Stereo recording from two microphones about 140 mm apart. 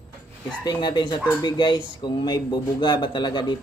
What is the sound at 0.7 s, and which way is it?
Speech, 30° left (ahead or behind).